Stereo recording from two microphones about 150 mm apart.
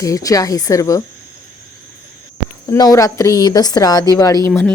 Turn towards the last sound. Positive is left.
turn(degrees=20)  # may be behind; listen again after turning